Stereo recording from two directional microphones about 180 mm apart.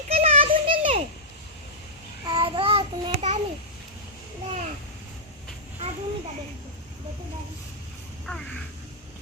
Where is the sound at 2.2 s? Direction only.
25° right (ahead or behind).